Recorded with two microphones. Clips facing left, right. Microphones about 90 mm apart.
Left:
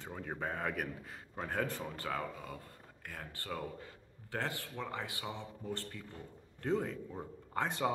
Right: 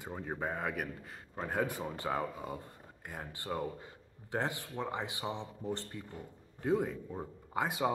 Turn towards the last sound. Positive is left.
turn(degrees=-10)  # may be behind; listen again after turning